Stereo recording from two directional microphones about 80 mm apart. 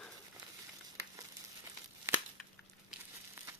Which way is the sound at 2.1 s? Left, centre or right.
Right.